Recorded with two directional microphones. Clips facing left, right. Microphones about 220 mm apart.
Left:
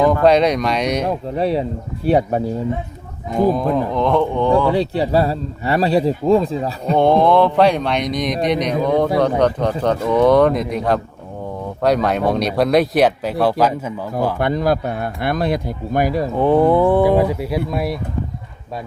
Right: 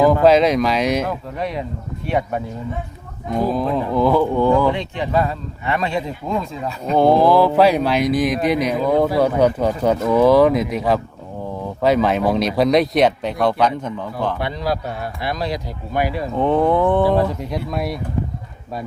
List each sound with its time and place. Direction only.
0.0 s speech: centre (ahead or behind)
1.4 s speech: 30° left (ahead or behind)
3.5 s speech: centre (ahead or behind)
4.7 s speech: 35° left (ahead or behind)
6.9 s speech: 5° right (ahead or behind)
14.3 s speech: 50° left (ahead or behind)
16.4 s speech: 5° left (ahead or behind)